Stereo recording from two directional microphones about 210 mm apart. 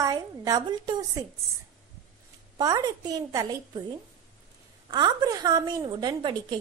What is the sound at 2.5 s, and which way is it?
A woman's voice, 20° right (ahead or behind).